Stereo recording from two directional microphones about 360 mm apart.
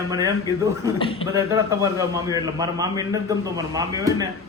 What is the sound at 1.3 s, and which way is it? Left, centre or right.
A man's voice, centre.